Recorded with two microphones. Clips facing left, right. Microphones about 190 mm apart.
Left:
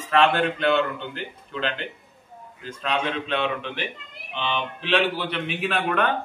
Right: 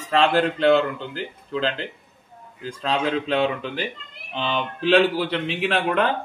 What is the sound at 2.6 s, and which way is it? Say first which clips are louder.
A man's voice: right 3 dB; 35° right (ahead or behind).